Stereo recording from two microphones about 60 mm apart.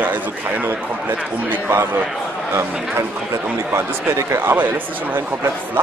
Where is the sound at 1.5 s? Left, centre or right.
Right.